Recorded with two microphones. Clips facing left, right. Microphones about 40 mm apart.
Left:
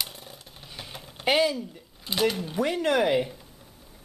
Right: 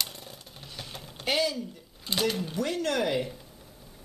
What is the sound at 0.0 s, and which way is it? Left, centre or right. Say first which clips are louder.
Jackhammer: even; centre.